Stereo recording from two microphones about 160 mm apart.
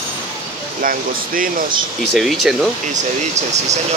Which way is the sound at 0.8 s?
60° right (ahead or behind).